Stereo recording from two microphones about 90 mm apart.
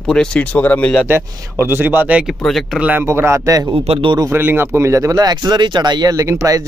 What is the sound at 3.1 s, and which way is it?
Speech, 30° right (ahead or behind).